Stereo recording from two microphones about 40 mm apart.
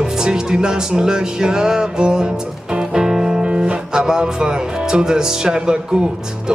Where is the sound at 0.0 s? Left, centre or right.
Centre.